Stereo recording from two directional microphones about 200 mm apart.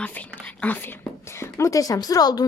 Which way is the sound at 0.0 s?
5° left (ahead or behind).